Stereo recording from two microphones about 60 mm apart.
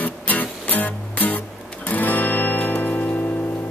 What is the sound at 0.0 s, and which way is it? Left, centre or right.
Music, left.